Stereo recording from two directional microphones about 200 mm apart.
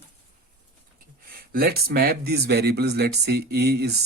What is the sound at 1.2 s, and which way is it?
Speech, 45° right (ahead or behind).